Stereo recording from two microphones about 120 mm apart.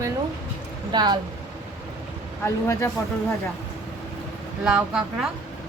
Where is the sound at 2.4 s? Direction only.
25° left (ahead or behind).